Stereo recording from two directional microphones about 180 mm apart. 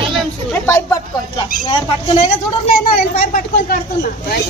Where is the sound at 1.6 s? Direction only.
25° left (ahead or behind).